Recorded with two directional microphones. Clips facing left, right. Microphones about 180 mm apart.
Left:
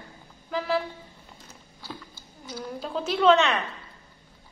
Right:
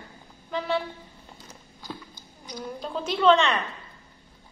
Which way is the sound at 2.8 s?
Centre (ahead or behind).